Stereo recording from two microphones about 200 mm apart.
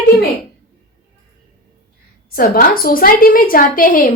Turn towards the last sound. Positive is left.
turn(degrees=45)  # may be behind; listen again after turning